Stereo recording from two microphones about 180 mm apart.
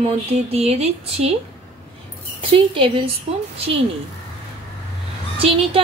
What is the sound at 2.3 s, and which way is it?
Speech, 30° right (ahead or behind).